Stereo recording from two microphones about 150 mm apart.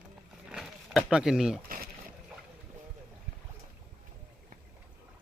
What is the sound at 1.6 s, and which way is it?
Speech, 70° right (ahead or behind).